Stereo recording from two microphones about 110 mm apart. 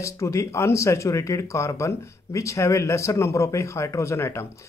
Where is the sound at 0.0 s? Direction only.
30° left (ahead or behind).